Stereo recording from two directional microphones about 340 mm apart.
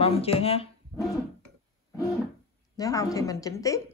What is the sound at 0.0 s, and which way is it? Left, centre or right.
Speech, centre.